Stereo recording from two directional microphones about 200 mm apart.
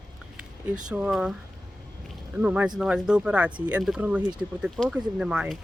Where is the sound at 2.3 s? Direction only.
5° right (ahead or behind).